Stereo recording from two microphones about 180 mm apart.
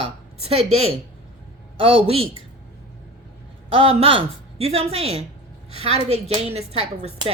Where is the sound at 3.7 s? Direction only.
30° right (ahead or behind).